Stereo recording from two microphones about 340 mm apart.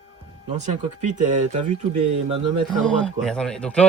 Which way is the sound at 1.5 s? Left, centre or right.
Right.